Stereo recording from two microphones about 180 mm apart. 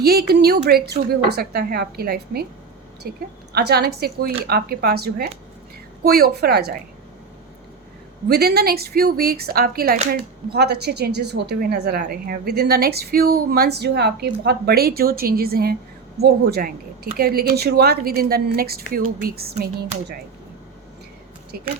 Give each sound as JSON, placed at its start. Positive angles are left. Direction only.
{"t": 0.0, "sound": "speech", "side_deg": -60}
{"t": 8.3, "sound": "speech", "side_deg": -60}
{"t": 21.5, "sound": "speech", "side_deg": -60}